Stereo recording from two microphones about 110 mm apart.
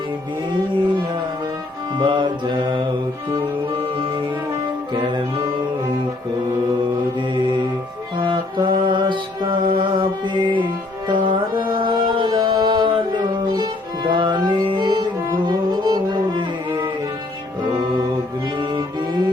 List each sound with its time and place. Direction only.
2.0 s mantra: 45° right (ahead or behind)
4.9 s music: 45° right (ahead or behind)
8.2 s music: 45° right (ahead or behind)
18.6 s music: 45° right (ahead or behind)